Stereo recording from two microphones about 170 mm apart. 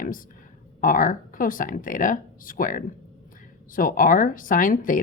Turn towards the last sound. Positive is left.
turn(degrees=55)  # may be behind; listen again after turning